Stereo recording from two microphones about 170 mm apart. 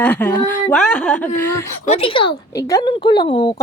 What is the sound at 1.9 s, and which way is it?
Speech, 35° left (ahead or behind).